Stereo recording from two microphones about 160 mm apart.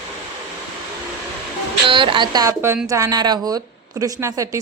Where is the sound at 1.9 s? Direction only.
30° right (ahead or behind).